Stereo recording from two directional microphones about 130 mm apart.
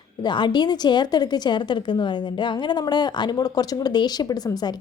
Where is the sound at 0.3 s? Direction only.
35° left (ahead or behind).